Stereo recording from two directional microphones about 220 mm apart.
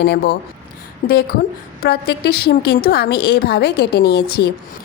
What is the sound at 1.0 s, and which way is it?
Speech, 35° left (ahead or behind).